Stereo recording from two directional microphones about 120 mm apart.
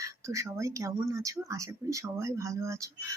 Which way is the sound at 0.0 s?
25° right (ahead or behind).